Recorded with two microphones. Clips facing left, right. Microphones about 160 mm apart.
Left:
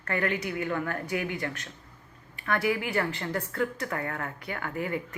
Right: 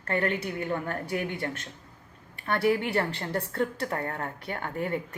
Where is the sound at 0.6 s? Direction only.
25° right (ahead or behind).